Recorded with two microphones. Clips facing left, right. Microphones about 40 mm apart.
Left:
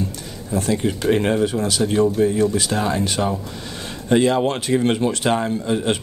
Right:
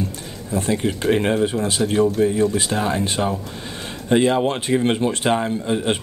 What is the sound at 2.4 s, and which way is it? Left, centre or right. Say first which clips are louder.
Speech: even; right.